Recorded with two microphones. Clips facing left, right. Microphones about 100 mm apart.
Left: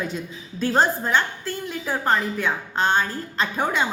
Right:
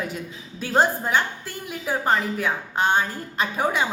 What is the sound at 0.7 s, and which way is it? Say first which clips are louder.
A woman's voice: even; 10° right (ahead or behind).